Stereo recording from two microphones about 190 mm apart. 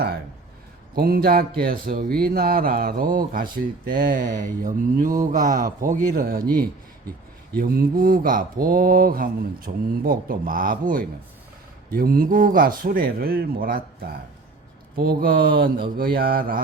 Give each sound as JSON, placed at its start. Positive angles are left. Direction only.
{"t": 0.9, "sound": "speech", "side_deg": -50}